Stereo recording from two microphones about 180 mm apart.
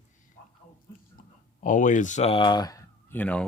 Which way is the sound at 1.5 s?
45° left (ahead or behind).